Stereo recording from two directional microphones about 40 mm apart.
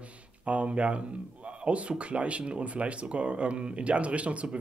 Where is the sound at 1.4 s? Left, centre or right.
Right.